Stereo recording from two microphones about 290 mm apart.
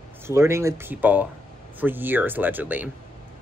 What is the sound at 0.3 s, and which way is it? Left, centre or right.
A woman's voice, centre.